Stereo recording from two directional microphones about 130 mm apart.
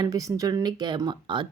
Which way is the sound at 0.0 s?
25° right (ahead or behind).